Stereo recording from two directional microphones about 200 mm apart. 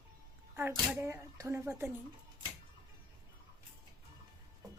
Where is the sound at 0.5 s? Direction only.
10° right (ahead or behind).